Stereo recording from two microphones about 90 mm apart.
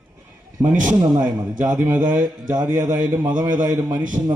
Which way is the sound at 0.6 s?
15° right (ahead or behind).